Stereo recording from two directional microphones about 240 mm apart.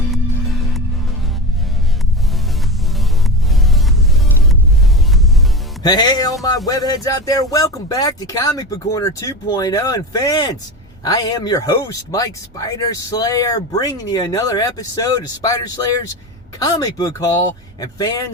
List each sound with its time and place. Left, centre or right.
0.1 s music: centre
5.8 s speech: centre